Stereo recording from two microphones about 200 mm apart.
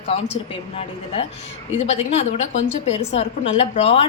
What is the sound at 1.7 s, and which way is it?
A woman's voice, 35° left (ahead or behind).